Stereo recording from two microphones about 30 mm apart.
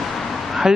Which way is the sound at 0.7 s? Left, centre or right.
Right.